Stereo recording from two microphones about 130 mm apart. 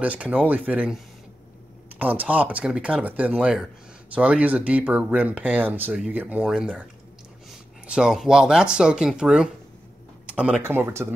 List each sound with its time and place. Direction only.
0.0 s speech: 10° right (ahead or behind)